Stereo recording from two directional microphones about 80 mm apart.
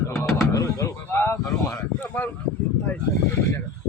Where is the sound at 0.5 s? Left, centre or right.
Left.